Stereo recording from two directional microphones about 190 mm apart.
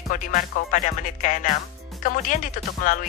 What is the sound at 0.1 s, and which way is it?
Speech, 45° left (ahead or behind).